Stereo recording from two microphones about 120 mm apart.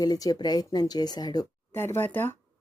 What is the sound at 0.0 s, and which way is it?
Speech, 35° left (ahead or behind).